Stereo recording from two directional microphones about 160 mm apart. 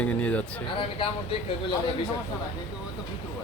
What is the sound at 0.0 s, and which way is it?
Speech, 10° left (ahead or behind).